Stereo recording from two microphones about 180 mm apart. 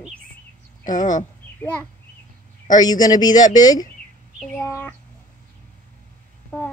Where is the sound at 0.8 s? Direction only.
45° left (ahead or behind).